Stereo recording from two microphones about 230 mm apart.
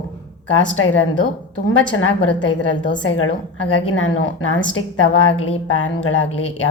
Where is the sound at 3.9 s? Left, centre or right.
Left.